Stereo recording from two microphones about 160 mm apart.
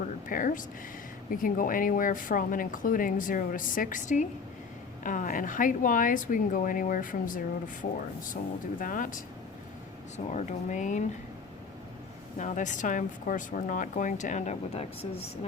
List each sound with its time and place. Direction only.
0.3 s a woman's voice: 55° left (ahead or behind)
10.2 s speech: 50° left (ahead or behind)
12.4 s speech: 50° left (ahead or behind)